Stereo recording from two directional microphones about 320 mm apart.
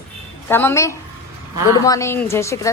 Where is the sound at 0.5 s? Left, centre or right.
Centre.